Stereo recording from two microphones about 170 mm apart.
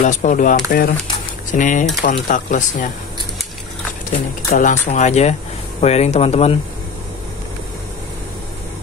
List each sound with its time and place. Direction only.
0.0 s speech: 45° left (ahead or behind)
4.5 s speech: 50° left (ahead or behind)